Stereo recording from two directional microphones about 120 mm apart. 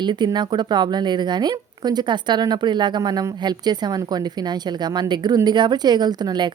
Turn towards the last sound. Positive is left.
turn(degrees=-35)  # may be behind; listen again after turning